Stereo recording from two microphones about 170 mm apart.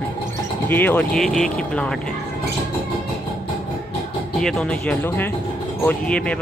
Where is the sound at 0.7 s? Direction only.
10° left (ahead or behind).